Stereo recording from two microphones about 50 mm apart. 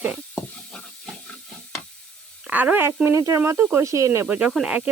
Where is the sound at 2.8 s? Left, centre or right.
Right.